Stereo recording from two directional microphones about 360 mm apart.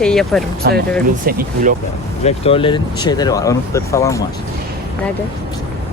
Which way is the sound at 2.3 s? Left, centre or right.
Centre.